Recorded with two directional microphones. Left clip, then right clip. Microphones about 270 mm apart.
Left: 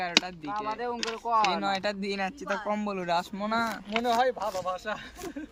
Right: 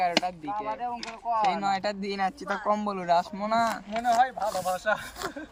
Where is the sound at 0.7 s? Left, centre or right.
Left.